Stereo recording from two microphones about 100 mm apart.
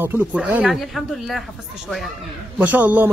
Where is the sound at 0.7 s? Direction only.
Centre (ahead or behind).